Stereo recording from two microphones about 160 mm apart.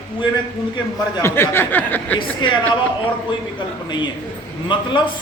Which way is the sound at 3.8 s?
30° left (ahead or behind).